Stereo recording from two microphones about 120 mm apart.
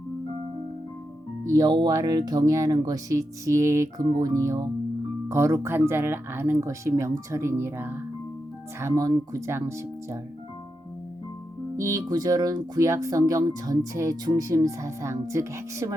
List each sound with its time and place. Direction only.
1.5 s speech: 35° right (ahead or behind); by 8.0 s 20° right (ahead or behind)
8.8 s speech: 30° right (ahead or behind)
11.8 s speech: 25° right (ahead or behind)